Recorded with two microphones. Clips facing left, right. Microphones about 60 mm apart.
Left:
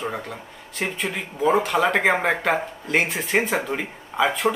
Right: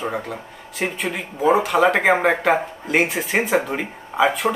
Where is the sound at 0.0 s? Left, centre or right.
Centre.